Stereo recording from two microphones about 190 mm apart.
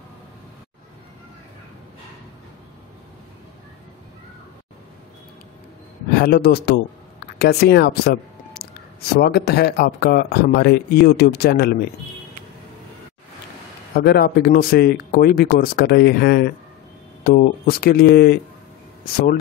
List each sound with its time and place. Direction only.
6.1 s speech: 55° left (ahead or behind)
13.9 s speech: 55° left (ahead or behind)